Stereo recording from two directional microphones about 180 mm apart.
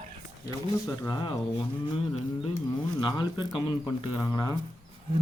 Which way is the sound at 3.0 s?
25° left (ahead or behind).